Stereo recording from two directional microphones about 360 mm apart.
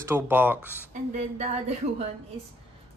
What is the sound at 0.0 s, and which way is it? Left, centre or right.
Speech, centre.